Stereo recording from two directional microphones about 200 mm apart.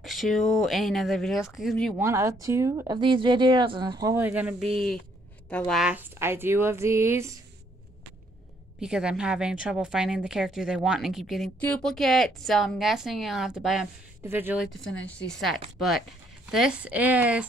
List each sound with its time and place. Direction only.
0.0 s speech: centre (ahead or behind)
2.0 s speech: 15° right (ahead or behind)
5.5 s speech: 5° left (ahead or behind); by 7.3 s 15° right (ahead or behind)
8.8 s speech: 5° right (ahead or behind)